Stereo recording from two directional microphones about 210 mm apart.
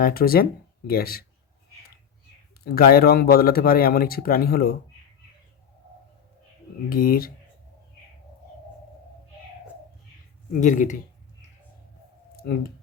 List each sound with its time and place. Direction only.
0.0 s speech: 45° left (ahead or behind)
2.6 s speech: 45° left (ahead or behind)
6.9 s speech: 45° left (ahead or behind)
10.6 s speech: 35° left (ahead or behind)